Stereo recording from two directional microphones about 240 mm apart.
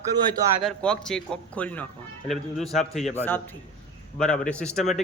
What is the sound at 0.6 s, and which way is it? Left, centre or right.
Speech, centre.